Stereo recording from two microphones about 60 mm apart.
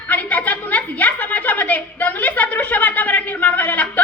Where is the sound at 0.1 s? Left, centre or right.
Left.